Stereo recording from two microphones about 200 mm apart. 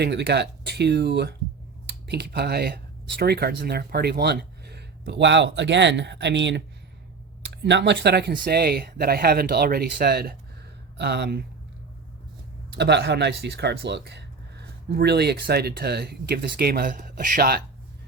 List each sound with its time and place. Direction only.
0.0 s speech: 55° right (ahead or behind)
12.7 s speech: 55° right (ahead or behind)